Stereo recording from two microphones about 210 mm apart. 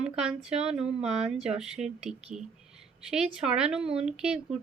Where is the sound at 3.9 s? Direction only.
5° right (ahead or behind).